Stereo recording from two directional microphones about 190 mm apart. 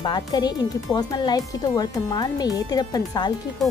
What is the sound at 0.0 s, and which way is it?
Speech, 20° left (ahead or behind).